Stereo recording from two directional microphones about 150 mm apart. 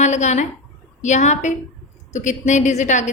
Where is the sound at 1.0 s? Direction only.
50° left (ahead or behind).